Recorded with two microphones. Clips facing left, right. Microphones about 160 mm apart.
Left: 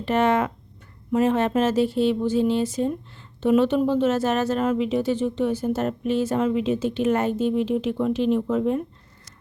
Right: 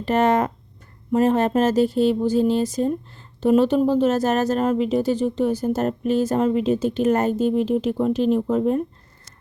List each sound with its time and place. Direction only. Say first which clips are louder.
0.0 s speech: right 2 dB; 40° right (ahead or behind)